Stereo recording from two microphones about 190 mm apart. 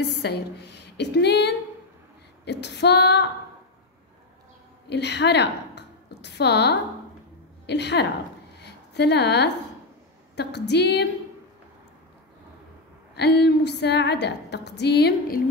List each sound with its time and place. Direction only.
0.0 s a woman's voice: 60° left (ahead or behind)
4.8 s a woman's voice: 65° left (ahead or behind)
8.5 s a sound: 60° left (ahead or behind)
10.3 s a woman's voice: 60° left (ahead or behind)
13.1 s a woman's voice: 60° left (ahead or behind)